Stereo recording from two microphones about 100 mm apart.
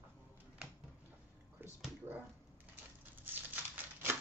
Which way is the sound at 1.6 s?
20° right (ahead or behind).